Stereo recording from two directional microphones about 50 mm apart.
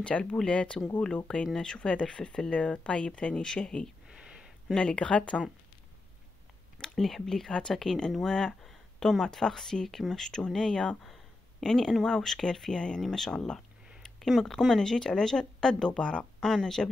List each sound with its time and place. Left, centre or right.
0.0 s speech: left
4.1 s a sound: centre
4.7 s speech: left
6.8 s speech: centre
16.4 s speech: centre